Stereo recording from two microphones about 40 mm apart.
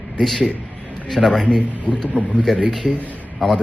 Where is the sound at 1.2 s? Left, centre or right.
Centre.